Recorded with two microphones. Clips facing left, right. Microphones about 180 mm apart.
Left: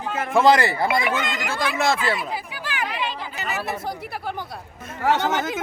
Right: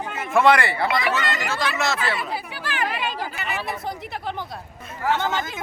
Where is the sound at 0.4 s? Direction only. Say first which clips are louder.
Left 2 dB; 40° left (ahead or behind).